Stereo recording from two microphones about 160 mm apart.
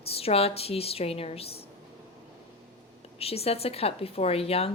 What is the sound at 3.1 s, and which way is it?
Speech, 40° left (ahead or behind).